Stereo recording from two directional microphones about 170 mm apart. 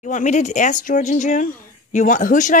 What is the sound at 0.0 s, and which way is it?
Speech, 45° left (ahead or behind).